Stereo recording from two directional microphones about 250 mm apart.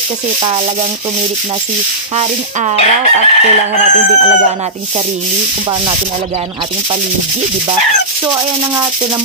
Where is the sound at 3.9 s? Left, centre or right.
Right.